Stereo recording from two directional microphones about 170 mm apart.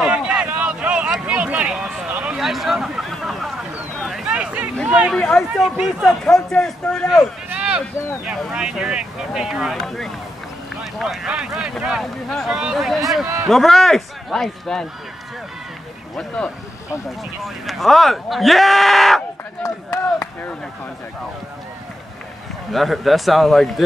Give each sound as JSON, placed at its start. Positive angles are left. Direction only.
{"t": 0.0, "sound": "a sound", "side_deg": -5}
{"t": 4.8, "sound": "speech", "side_deg": -5}
{"t": 7.4, "sound": "a sound", "side_deg": -5}
{"t": 8.3, "sound": "speech", "side_deg": -5}
{"t": 17.6, "sound": "speech", "side_deg": 0}
{"t": 19.6, "sound": "speech", "side_deg": 15}
{"t": 22.7, "sound": "speech", "side_deg": 0}